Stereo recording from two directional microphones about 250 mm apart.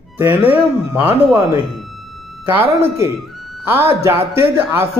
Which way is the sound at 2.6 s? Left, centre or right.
Right.